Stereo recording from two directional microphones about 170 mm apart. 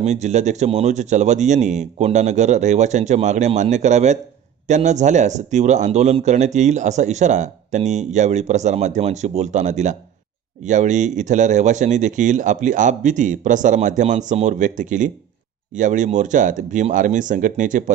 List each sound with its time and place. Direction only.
0.0 s speech: 45° right (ahead or behind)